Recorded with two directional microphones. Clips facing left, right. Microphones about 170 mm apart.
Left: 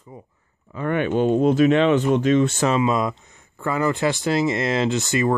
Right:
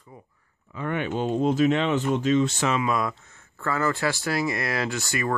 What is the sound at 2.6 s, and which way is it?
Speech, 30° left (ahead or behind).